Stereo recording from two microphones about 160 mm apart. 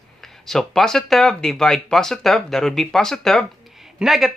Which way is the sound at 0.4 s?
Centre (ahead or behind).